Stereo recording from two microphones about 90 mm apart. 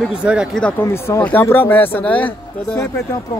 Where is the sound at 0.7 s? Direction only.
30° left (ahead or behind).